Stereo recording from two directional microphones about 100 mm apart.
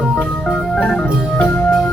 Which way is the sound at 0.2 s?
10° left (ahead or behind).